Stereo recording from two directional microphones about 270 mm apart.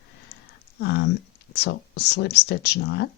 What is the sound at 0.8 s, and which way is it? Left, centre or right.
Speech, left.